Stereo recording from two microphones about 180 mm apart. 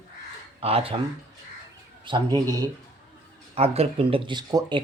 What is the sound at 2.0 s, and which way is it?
Speech, 25° right (ahead or behind).